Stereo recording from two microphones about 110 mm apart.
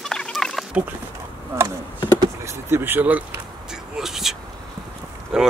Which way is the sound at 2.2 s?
25° right (ahead or behind).